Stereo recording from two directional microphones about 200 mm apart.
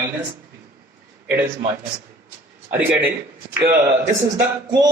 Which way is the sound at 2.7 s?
10° right (ahead or behind).